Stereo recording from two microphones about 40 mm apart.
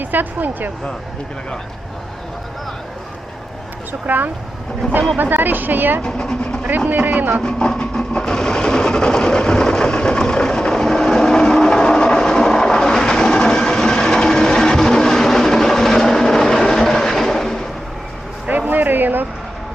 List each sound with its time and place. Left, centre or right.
0.0 s speech: right
4.0 s speech: right
6.0 s speech: centre
6.9 s speech: right
7.4 s train: centre
18.4 s music: right